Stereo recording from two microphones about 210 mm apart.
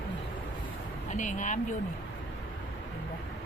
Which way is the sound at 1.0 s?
35° left (ahead or behind).